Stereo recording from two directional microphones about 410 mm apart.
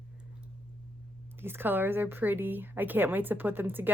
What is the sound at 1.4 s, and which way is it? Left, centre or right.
A woman's voice, centre.